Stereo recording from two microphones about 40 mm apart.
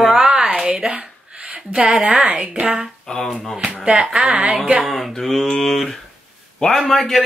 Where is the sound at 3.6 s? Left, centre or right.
Right.